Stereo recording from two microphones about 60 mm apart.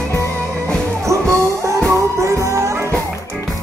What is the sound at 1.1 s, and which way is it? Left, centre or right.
Music, right.